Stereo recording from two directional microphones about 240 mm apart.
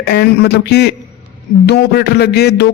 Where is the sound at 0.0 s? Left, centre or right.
Left.